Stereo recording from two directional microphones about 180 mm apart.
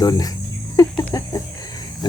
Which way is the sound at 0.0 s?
20° left (ahead or behind).